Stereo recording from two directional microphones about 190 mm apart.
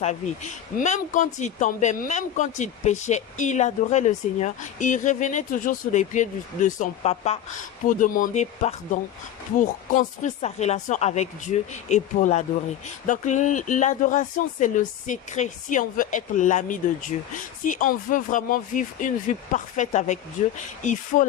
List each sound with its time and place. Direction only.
0.0 s speech: 40° left (ahead or behind)